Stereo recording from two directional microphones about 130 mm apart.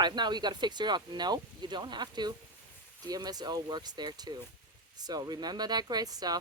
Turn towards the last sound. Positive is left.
turn(degrees=-30)  # may be behind; listen again after turning